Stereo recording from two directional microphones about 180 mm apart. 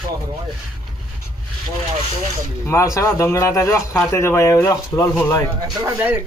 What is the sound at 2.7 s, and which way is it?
Speech, 15° left (ahead or behind).